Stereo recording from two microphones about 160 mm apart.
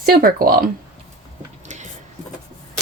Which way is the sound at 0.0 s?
65° right (ahead or behind).